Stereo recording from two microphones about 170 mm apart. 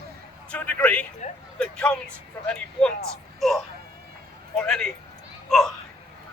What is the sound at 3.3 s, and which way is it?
Music, centre (ahead or behind).